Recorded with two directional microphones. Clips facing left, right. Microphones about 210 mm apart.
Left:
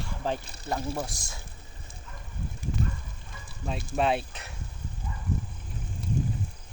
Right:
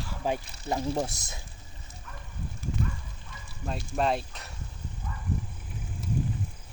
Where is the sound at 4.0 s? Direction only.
Centre (ahead or behind).